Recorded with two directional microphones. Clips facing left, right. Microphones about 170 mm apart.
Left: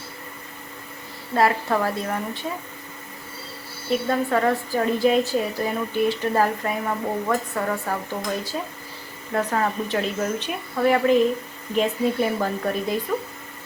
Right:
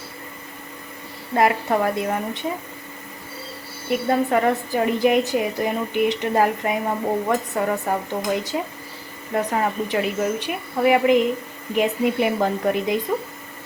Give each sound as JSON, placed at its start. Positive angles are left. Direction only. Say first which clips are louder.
{"t": 1.4, "sound": "a woman's voice", "louder": "right 2 dB", "side_deg": -15}
{"t": 3.8, "sound": "a woman's voice", "louder": "right 2 dB", "side_deg": -20}
{"t": 9.3, "sound": "a woman's voice", "louder": "right 1 dB", "side_deg": -15}